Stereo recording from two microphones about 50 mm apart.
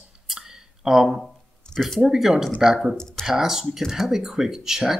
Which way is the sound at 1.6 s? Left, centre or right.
Centre.